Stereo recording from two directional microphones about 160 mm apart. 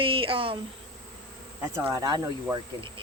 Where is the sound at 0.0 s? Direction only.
35° right (ahead or behind).